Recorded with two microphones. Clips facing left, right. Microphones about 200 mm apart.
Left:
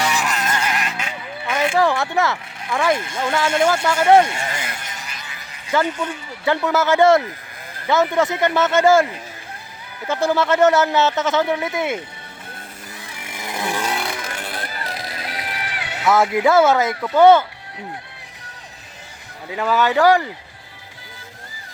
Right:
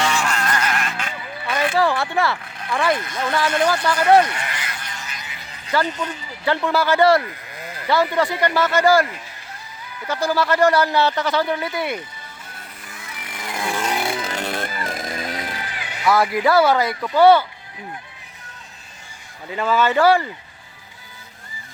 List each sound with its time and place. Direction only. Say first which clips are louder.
0.5 s sheep: even; 10° left (ahead or behind)
2.6 s speech: left 1 dB; 10° left (ahead or behind)
2.9 s speech: left 1 dB; 25° left (ahead or behind)
3.9 s a sound: left 1 dB; 25° left (ahead or behind)
5.7 s speech: left 2 dB; 10° left (ahead or behind)
6.7 s speech: left 2 dB; 20° left (ahead or behind)
13.1 s vehicle: even; 25° left (ahead or behind)
14.0 s music: right 4 dB; 30° right (ahead or behind); by 15.2 s 50° right (ahead or behind)
15.6 s music: left 3 dB; 70° left (ahead or behind)
16.0 s speech: left 2 dB; 20° left (ahead or behind)
19.5 s speech: even; 15° left (ahead or behind)